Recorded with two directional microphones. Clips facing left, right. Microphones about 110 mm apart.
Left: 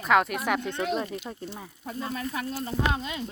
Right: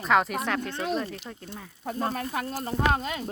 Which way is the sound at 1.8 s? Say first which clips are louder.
Right 3 dB; 50° right (ahead or behind).